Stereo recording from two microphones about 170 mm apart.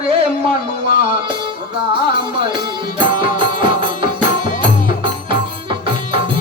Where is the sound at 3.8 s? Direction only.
30° right (ahead or behind).